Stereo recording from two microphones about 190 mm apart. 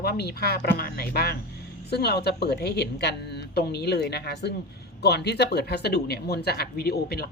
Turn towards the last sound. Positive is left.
turn(degrees=55)  # may be behind; listen again after turning